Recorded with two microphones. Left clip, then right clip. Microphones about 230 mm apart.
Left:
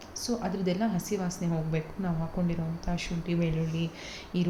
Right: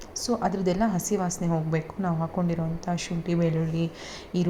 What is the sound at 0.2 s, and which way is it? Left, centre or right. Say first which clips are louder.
A woman's voice: right 6 dB; centre.